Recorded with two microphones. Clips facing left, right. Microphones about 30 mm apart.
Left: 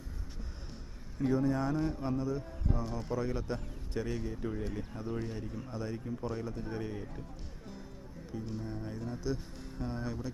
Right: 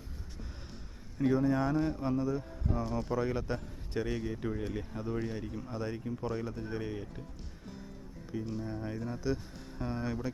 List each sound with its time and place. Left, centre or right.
1.2 s a man's voice: centre
5.7 s speech: right
6.1 s a man's voice: centre
6.7 s speech: centre
8.4 s a man's voice: centre
9.2 s speech: centre